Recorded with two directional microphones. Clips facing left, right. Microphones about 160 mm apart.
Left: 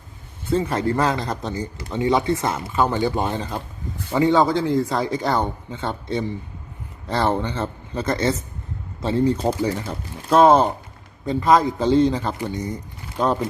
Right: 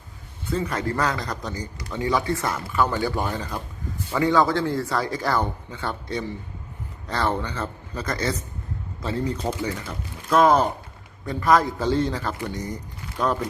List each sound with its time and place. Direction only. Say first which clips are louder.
0.5 s speech: left 5 dB; 30° left (ahead or behind)